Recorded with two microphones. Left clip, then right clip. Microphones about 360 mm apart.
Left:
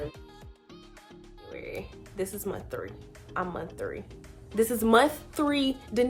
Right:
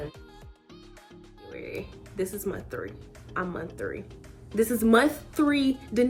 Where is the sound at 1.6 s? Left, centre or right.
Left.